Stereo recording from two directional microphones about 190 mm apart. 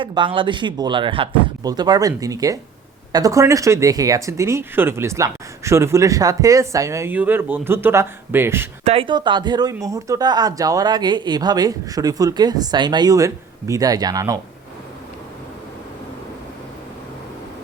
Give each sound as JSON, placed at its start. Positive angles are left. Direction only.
{"t": 0.0, "sound": "speech", "side_deg": -25}
{"t": 8.8, "sound": "speech", "side_deg": -30}